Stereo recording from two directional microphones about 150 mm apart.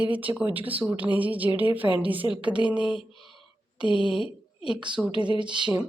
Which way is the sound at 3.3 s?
Centre (ahead or behind).